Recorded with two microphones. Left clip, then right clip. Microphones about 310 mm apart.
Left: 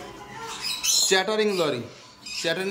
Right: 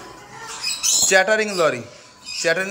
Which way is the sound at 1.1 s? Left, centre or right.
Centre.